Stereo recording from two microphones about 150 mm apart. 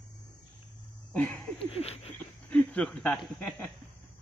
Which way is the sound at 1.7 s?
45° left (ahead or behind).